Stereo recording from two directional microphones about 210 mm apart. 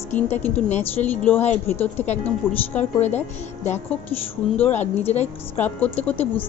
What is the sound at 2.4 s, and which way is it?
Speech, 10° left (ahead or behind).